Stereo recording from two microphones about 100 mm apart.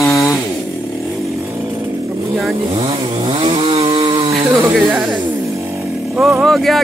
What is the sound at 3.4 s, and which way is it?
Chainsaw, 75° right (ahead or behind).